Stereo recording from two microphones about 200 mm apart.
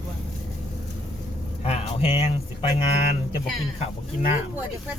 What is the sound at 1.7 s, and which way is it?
Speech, 30° left (ahead or behind).